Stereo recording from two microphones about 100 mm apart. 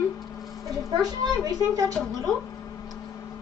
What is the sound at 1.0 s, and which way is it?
Speech, 40° right (ahead or behind).